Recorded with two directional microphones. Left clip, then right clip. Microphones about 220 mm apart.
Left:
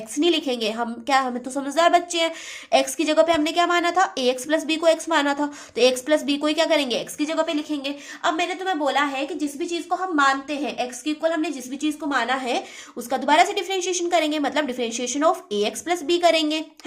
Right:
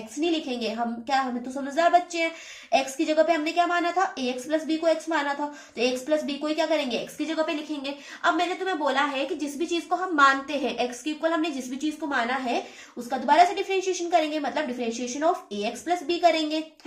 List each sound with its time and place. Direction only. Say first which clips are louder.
0.2 s speech: left 6 dB; 35° left (ahead or behind); by 11.9 s 20° left (ahead or behind)
12.0 s speech: left 3 dB; 35° left (ahead or behind)